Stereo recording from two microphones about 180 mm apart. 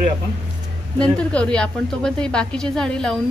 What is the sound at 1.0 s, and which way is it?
Speech, 5° left (ahead or behind).